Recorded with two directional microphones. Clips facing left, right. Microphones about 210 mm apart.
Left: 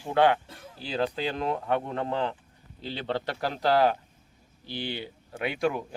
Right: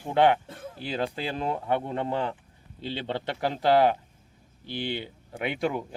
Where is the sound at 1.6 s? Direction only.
25° right (ahead or behind).